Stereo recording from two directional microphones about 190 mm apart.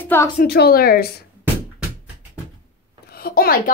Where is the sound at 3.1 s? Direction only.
55° left (ahead or behind).